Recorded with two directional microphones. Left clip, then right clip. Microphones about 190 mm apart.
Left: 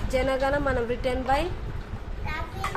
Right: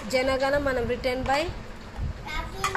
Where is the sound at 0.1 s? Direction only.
5° left (ahead or behind).